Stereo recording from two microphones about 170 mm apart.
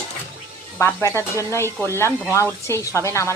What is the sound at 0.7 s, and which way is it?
Speech, 15° left (ahead or behind).